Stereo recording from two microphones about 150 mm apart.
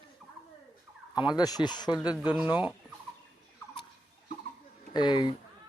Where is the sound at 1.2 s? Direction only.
30° left (ahead or behind).